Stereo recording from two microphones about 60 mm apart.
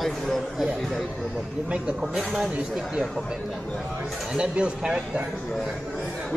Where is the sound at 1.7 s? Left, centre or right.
Centre.